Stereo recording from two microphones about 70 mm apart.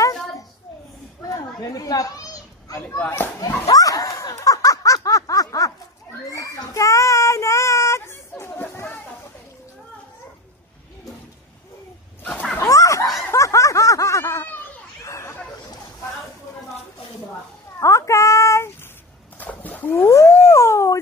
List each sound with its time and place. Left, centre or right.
1.3 s children playing: left
3.7 s snicker: left
6.2 s child singing: left
12.2 s dog: left
12.5 s a sound: left
13.3 s snicker: left
14.2 s a sound: left
17.7 s child singing: left
19.3 s dog: left